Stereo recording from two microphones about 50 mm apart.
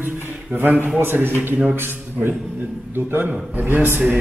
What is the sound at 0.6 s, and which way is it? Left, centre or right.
Speech, right.